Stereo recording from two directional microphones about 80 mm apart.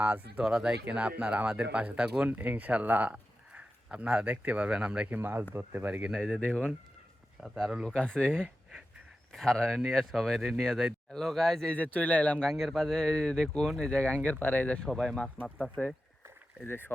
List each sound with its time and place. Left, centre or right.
0.0 s speech: centre
0.4 s speech: centre
6.4 s speech: centre
7.4 s speech: centre
7.9 s speech: centre
9.3 s speech: centre
12.5 s speech: centre; by 14.8 s left
14.8 s speech: centre
16.6 s speech: left